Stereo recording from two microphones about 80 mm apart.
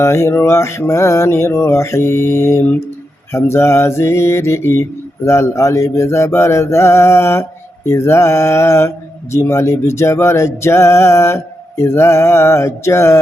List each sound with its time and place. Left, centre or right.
0.0 s mantra: left